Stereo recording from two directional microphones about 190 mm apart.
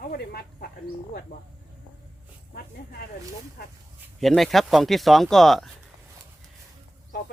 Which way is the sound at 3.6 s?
55° left (ahead or behind).